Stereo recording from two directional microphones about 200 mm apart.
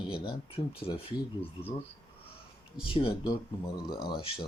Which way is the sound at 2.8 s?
25° left (ahead or behind).